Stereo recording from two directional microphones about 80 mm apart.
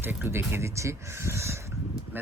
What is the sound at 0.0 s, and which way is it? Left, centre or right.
Speech, right.